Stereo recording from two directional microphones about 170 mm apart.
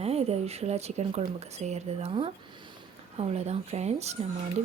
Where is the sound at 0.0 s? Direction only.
35° right (ahead or behind).